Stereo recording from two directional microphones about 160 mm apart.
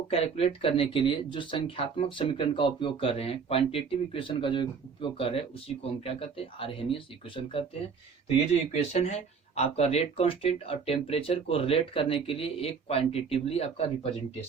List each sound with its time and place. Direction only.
0.1 s speech: 40° left (ahead or behind)
8.7 s speech: 45° left (ahead or behind)